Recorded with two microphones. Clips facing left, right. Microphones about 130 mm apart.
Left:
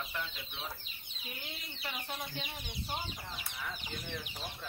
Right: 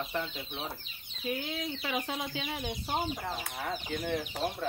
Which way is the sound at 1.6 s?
90° right.